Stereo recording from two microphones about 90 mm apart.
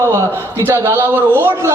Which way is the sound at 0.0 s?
30° right (ahead or behind).